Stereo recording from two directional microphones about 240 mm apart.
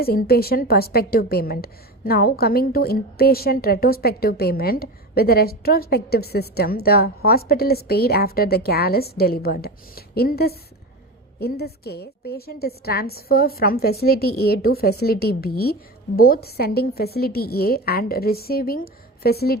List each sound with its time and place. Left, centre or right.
0.0 s a woman's voice: left